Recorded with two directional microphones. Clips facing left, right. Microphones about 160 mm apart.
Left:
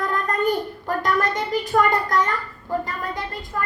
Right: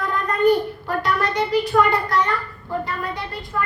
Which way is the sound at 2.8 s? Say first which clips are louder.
Right 1 dB; 45° left (ahead or behind).